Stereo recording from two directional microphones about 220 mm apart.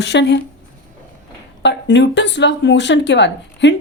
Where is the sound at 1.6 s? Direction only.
55° left (ahead or behind).